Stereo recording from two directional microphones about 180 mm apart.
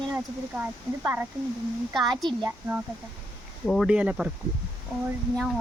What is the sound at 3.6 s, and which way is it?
Speech, 5° left (ahead or behind).